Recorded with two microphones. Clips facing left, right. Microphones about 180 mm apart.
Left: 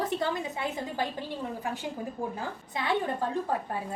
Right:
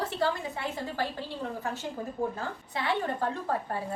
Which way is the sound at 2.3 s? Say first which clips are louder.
Even; 15° left (ahead or behind).